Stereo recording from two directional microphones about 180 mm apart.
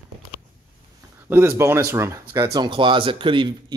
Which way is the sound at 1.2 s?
15° right (ahead or behind).